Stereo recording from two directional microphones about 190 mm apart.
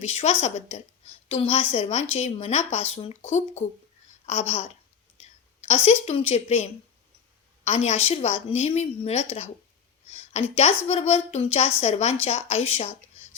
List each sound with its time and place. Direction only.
0.0 s a woman's voice: 30° left (ahead or behind)
10.1 s a sound: 35° left (ahead or behind)
10.8 s speech: 35° left (ahead or behind)